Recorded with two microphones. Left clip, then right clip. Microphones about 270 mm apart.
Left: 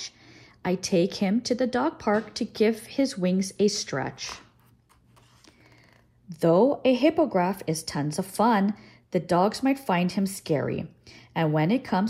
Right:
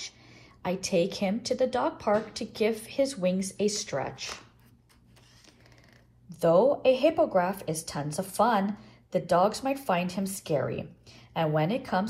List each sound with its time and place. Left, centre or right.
0.0 s a woman's voice: left
6.7 s a woman's voice: left